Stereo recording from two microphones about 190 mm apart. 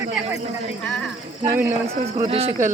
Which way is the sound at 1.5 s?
10° right (ahead or behind).